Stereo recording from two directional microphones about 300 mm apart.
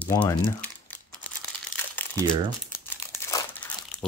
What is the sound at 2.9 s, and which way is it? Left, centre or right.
Crumpling, centre.